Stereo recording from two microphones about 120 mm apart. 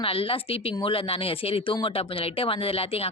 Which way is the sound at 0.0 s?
50° left (ahead or behind).